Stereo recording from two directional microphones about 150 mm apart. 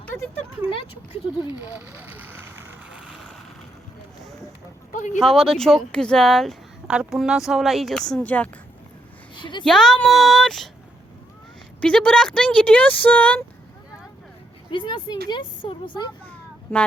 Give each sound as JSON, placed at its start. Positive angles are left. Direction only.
{"t": 0.0, "sound": "a sound", "side_deg": 15}
{"t": 1.7, "sound": "vehicle", "side_deg": -10}
{"t": 3.0, "sound": "vehicle", "side_deg": 0}
{"t": 4.9, "sound": "speech", "side_deg": 55}
{"t": 5.2, "sound": "speech", "side_deg": 0}
{"t": 9.3, "sound": "a sound", "side_deg": 30}
{"t": 9.6, "sound": "speech", "side_deg": 5}
{"t": 11.8, "sound": "speech", "side_deg": 5}
{"t": 14.7, "sound": "speech", "side_deg": 30}
{"t": 16.7, "sound": "speech", "side_deg": 15}